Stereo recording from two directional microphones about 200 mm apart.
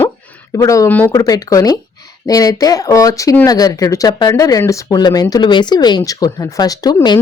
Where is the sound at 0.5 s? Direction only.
15° left (ahead or behind).